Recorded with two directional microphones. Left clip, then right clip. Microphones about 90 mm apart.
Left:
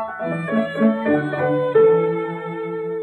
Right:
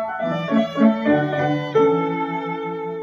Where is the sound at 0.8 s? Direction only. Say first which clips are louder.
Right 1 dB; 30° right (ahead or behind).